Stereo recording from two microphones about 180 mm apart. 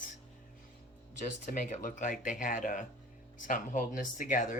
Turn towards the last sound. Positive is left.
turn(degrees=50)  # may be behind; listen again after turning